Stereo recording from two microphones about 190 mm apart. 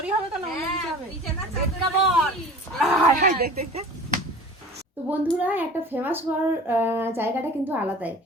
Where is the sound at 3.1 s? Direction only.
55° right (ahead or behind).